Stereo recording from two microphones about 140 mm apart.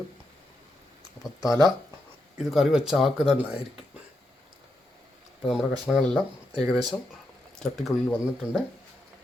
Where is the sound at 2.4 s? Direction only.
Centre (ahead or behind).